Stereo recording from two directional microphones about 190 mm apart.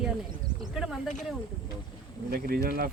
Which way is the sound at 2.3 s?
50° right (ahead or behind).